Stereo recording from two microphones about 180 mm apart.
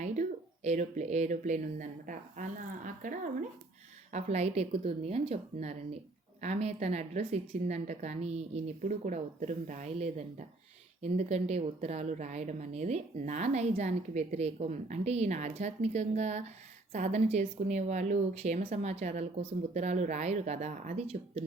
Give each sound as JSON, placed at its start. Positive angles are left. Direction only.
{"t": 0.0, "sound": "speech", "side_deg": -40}